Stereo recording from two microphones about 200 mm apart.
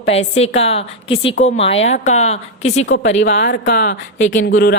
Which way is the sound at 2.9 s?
65° left (ahead or behind).